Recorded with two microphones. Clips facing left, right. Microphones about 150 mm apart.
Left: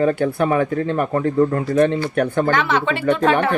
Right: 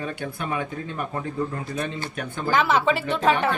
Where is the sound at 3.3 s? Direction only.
65° left (ahead or behind).